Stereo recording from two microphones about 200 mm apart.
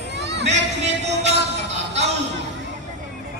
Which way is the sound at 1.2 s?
35° right (ahead or behind).